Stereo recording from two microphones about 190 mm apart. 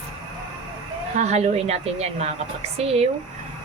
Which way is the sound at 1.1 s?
35° right (ahead or behind).